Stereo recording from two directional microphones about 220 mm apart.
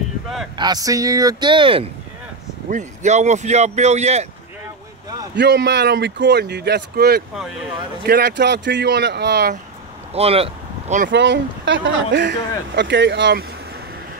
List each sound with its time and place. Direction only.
0.6 s speech: 15° right (ahead or behind)
2.7 s speech: 35° right (ahead or behind)
5.3 s speech: 50° right (ahead or behind)
10.1 s speech: 25° right (ahead or behind)
11.1 s speech: 55° right (ahead or behind)